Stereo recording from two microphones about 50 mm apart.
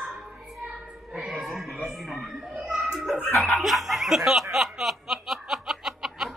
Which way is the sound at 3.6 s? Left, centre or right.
Centre.